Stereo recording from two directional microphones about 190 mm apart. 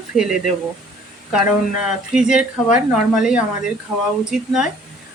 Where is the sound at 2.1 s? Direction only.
5° right (ahead or behind).